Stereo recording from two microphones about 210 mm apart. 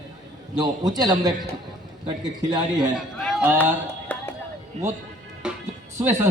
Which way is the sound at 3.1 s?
Centre (ahead or behind).